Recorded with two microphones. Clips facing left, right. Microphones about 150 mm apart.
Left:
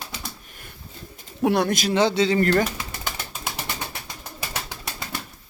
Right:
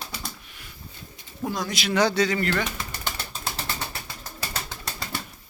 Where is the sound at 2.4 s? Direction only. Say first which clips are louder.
Left 6 dB; 40° left (ahead or behind).